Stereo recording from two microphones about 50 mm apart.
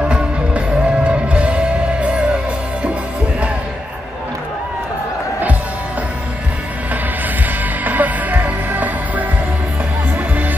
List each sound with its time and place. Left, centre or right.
0.0 s music: right
7.8 s music: right